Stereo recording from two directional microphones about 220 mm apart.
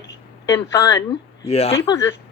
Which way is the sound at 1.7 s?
15° left (ahead or behind).